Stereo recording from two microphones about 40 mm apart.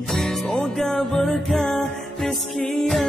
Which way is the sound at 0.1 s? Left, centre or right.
Centre.